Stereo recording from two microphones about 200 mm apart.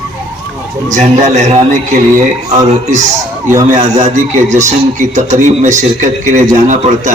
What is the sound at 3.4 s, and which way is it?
Speech, 15° right (ahead or behind).